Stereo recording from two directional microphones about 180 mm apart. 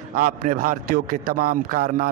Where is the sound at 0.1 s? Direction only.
55° right (ahead or behind).